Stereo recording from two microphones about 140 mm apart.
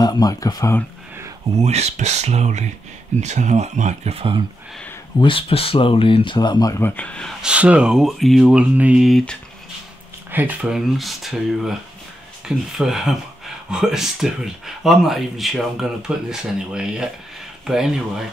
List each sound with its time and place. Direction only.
0.0 s speech: 30° left (ahead or behind)
1.6 s speech: 50° right (ahead or behind)
5.2 s speech: 40° left (ahead or behind)
6.8 s speech: 15° left (ahead or behind)
7.4 s mantra: 10° right (ahead or behind)
10.3 s mantra: 10° right (ahead or behind)
11.0 s speech: centre (ahead or behind)